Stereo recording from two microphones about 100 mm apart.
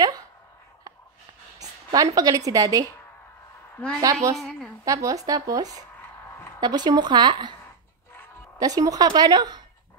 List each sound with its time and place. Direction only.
1.6 s speech: 40° right (ahead or behind)
4.0 s speech: 35° right (ahead or behind)
4.4 s a woman's voice: 5° left (ahead or behind)
4.8 s speech: 35° right (ahead or behind)
8.5 s speech: 40° right (ahead or behind)